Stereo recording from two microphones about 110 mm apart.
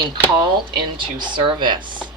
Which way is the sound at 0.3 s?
45° right (ahead or behind).